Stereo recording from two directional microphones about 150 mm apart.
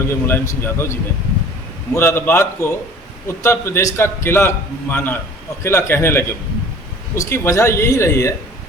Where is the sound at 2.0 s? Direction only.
15° left (ahead or behind).